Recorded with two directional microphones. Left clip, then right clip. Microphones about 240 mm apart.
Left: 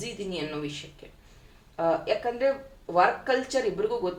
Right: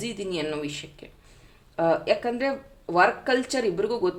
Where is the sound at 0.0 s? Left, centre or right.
Right.